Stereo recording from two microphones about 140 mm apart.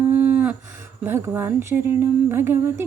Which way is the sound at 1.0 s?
15° right (ahead or behind).